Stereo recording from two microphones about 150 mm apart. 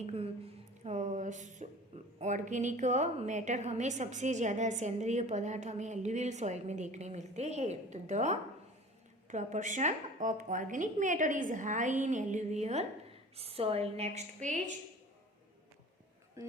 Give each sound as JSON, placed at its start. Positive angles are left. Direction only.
{"t": 0.0, "sound": "a woman's voice", "side_deg": -40}
{"t": 0.9, "sound": "a sound", "side_deg": -55}
{"t": 2.1, "sound": "a woman's voice", "side_deg": -55}
{"t": 16.4, "sound": "speech", "side_deg": -20}